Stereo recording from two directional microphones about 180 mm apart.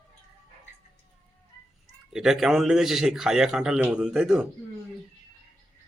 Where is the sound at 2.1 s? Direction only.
Centre (ahead or behind).